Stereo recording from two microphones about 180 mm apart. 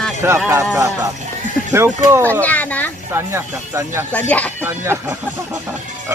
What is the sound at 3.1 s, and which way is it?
Speech, 15° right (ahead or behind).